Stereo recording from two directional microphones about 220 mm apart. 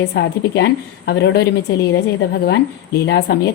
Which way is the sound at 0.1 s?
50° left (ahead or behind).